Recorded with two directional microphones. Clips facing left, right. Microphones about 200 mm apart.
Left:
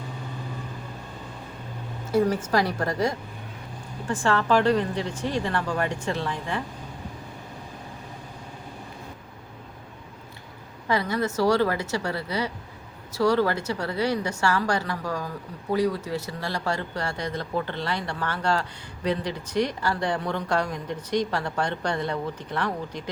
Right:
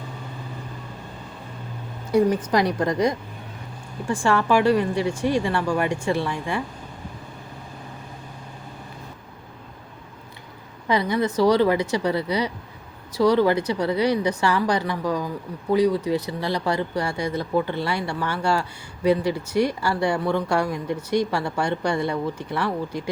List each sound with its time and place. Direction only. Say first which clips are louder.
2.5 s a woman's voice: right 3 dB; 20° right (ahead or behind)
10.8 s a woman's voice: right 3 dB; 20° right (ahead or behind)